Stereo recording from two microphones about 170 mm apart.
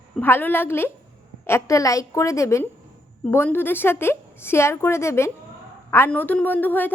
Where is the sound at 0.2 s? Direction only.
10° left (ahead or behind).